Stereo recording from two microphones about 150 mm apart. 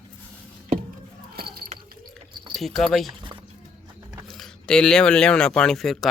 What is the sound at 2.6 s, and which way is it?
Speech, centre (ahead or behind).